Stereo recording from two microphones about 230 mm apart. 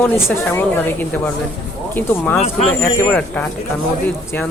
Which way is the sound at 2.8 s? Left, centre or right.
Centre.